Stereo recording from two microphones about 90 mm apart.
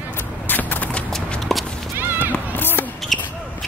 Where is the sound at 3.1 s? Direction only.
Centre (ahead or behind).